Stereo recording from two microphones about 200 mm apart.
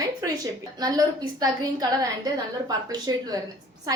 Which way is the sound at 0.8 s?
20° right (ahead or behind).